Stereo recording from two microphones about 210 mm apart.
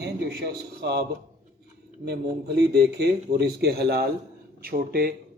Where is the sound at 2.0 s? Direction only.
50° right (ahead or behind).